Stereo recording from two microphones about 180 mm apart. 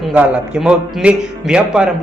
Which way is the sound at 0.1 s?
5° right (ahead or behind).